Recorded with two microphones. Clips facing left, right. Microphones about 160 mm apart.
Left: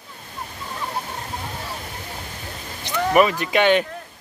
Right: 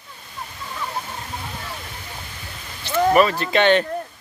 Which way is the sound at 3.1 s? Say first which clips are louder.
Left 1 dB; 15° left (ahead or behind).